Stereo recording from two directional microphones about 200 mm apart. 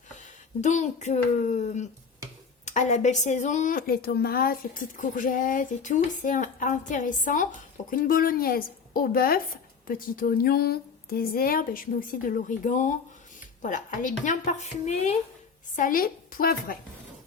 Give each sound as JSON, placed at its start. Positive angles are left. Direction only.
{"t": 0.6, "sound": "speech", "side_deg": 35}